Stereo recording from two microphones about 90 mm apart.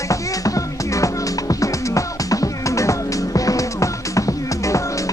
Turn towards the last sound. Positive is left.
turn(degrees=35)  # may be behind; listen again after turning